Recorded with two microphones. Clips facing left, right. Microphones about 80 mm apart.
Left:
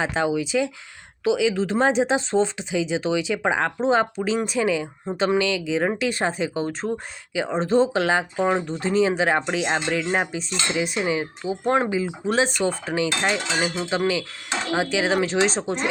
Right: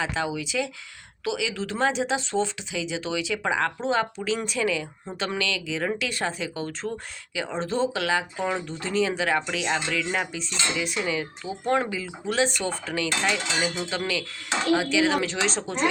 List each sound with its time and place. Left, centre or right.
0.0 s speech: left